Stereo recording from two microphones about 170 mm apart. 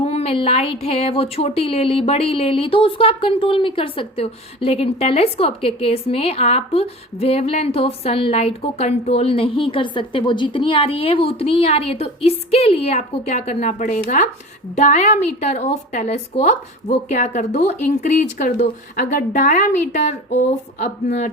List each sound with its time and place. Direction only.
0.0 s a woman's voice: 40° left (ahead or behind)